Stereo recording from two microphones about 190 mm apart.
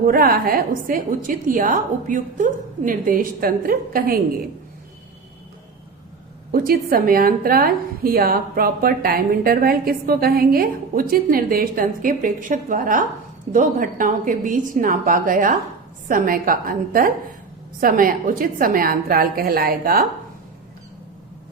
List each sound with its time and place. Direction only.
0.0 s a woman's voice: 50° right (ahead or behind)
6.5 s a woman's voice: 50° right (ahead or behind)